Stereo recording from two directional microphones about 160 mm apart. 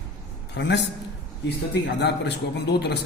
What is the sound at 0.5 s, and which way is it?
Speech, 90° left.